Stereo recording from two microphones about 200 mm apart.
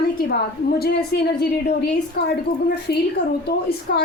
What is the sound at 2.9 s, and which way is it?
A woman's voice, 55° left (ahead or behind).